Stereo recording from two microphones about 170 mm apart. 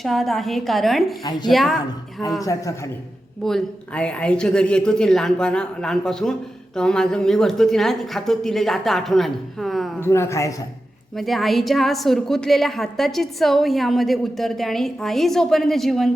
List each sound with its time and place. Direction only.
0.0 s a woman's voice: centre (ahead or behind)
1.2 s a man's voice: 25° left (ahead or behind)
1.5 s a woman's voice: centre (ahead or behind)
2.4 s a man's voice: 20° left (ahead or behind)
3.4 s a woman's voice: 5° left (ahead or behind)
10.0 s speech: 15° left (ahead or behind)
11.2 s a woman's voice: centre (ahead or behind)